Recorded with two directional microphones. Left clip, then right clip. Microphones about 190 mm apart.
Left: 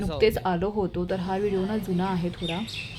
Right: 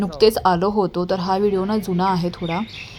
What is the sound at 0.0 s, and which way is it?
Speech, 20° right (ahead or behind).